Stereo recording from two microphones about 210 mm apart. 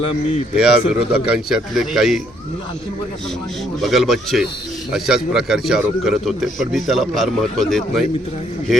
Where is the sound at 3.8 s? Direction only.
Centre (ahead or behind).